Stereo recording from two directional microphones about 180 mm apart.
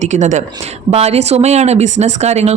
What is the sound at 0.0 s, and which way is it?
Speech, 40° right (ahead or behind).